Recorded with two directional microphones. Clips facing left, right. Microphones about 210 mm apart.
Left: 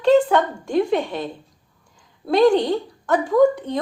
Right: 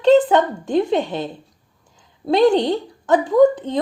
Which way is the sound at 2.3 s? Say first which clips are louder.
Right 1 dB; 25° right (ahead or behind).